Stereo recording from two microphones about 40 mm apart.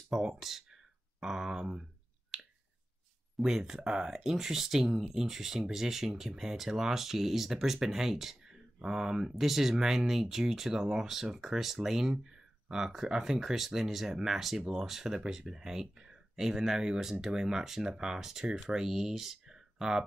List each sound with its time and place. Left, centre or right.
0.4 s speech: centre
2.3 s finger snapping: centre
3.4 s speech: centre